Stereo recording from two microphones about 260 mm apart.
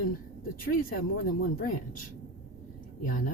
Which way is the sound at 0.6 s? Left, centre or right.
Left.